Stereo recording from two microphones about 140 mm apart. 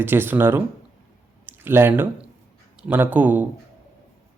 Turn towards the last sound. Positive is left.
turn(degrees=-15)  # may be behind; listen again after turning